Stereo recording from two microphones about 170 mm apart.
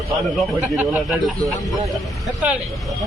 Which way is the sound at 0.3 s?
5° right (ahead or behind).